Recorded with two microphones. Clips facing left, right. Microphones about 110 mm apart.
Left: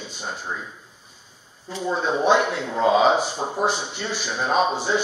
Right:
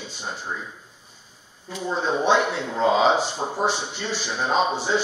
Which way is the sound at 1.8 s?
15° left (ahead or behind).